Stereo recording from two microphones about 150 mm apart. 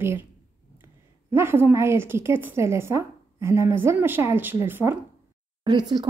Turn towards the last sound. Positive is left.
turn(degrees=-30)  # may be behind; listen again after turning